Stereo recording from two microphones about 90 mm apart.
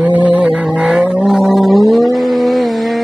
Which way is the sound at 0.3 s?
15° right (ahead or behind).